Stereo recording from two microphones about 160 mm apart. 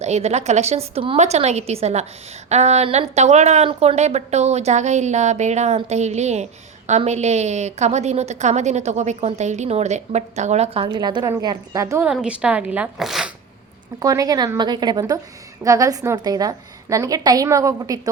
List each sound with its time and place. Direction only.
0.0 s a woman's voice: 45° right (ahead or behind)
10.8 s a woman's voice: 25° right (ahead or behind)
12.1 s speech: 5° right (ahead or behind)
14.0 s a woman's voice: 20° right (ahead or behind)